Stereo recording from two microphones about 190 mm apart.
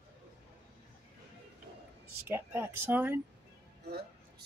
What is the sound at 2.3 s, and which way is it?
Speech, 10° right (ahead or behind).